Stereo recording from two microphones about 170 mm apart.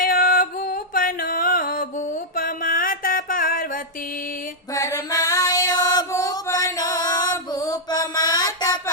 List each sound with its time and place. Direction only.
0.0 s music: 55° left (ahead or behind)
2.3 s a sound: 55° left (ahead or behind)
4.7 s female singing: 20° left (ahead or behind)